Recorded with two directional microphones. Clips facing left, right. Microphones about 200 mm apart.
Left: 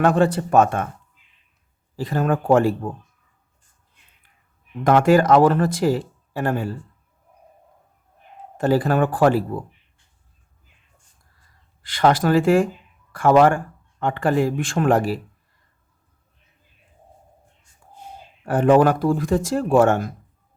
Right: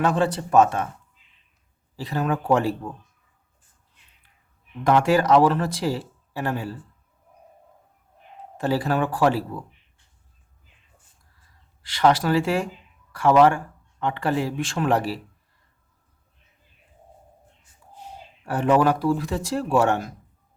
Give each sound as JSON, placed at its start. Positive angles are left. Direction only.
{"t": 0.0, "sound": "speech", "side_deg": 55}
{"t": 2.0, "sound": "speech", "side_deg": 50}
{"t": 4.8, "sound": "speech", "side_deg": 50}
{"t": 8.5, "sound": "speech", "side_deg": 50}
{"t": 11.8, "sound": "speech", "side_deg": 50}
{"t": 18.4, "sound": "speech", "side_deg": 50}